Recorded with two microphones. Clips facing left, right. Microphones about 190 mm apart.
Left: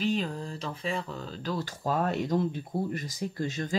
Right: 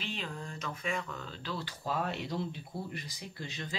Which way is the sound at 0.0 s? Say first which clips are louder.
Left 11 dB; 40° left (ahead or behind).